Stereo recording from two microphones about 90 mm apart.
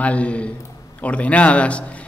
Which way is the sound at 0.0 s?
15° left (ahead or behind).